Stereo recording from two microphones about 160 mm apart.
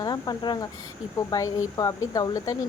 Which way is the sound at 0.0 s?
25° left (ahead or behind).